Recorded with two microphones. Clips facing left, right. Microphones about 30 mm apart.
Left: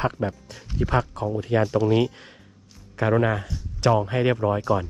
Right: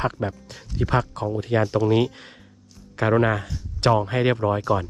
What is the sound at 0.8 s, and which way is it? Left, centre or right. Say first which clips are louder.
Speech: right 1 dB; right.